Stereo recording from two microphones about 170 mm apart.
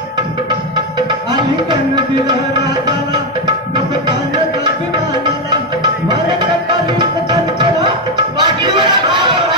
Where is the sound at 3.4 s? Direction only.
25° right (ahead or behind).